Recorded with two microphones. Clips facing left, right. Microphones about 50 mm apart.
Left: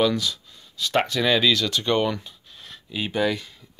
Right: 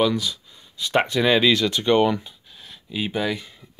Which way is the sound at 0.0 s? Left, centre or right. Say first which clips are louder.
Right 1 dB; centre.